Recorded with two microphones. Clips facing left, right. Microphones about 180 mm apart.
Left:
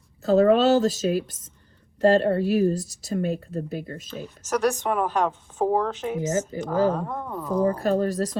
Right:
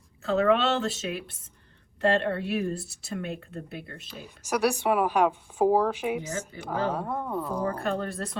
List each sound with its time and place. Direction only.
0.2 s speech: 40° left (ahead or behind)
4.1 s a woman's voice: 10° right (ahead or behind)
7.7 s speech: 35° left (ahead or behind)